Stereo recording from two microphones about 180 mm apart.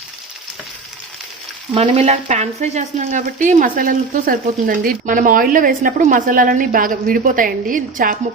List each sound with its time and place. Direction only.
1.7 s speech: 30° right (ahead or behind); by 8.1 s 50° right (ahead or behind)